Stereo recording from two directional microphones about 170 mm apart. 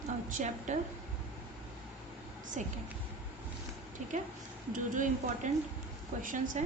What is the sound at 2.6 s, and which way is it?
Speech, 45° right (ahead or behind).